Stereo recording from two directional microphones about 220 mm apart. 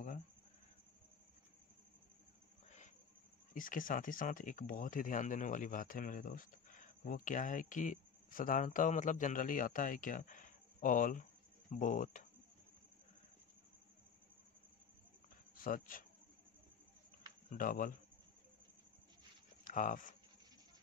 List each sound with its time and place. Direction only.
3.5 s speech: 40° left (ahead or behind)
15.5 s speech: 40° left (ahead or behind)
17.5 s speech: 40° left (ahead or behind)
19.6 s speech: 35° left (ahead or behind)